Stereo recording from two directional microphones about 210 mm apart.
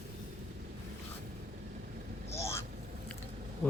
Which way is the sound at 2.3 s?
15° left (ahead or behind).